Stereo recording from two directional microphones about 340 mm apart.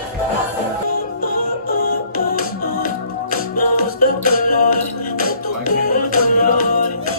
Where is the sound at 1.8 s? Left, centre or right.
Left.